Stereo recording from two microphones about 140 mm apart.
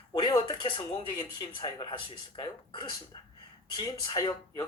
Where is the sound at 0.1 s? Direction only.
30° left (ahead or behind).